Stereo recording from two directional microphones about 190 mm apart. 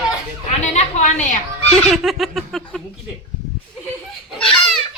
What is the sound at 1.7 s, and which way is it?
A woman's voice, centre (ahead or behind).